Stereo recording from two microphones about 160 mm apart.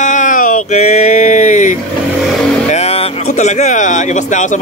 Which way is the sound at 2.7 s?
40° left (ahead or behind).